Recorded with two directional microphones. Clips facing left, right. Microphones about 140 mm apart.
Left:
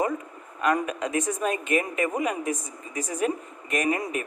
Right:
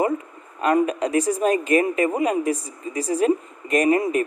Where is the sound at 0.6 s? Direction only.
30° right (ahead or behind).